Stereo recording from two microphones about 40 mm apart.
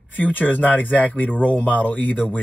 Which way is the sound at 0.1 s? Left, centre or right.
Left.